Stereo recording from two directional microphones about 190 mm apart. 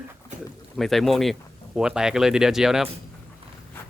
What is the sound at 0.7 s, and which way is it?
Speech, centre (ahead or behind).